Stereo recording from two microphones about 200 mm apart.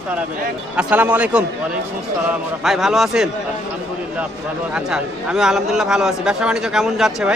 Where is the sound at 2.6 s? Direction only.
Centre (ahead or behind).